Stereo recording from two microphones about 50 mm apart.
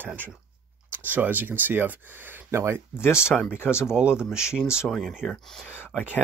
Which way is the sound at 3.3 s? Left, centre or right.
Left.